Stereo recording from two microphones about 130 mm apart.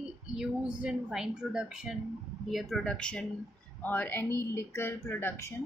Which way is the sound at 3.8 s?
15° left (ahead or behind).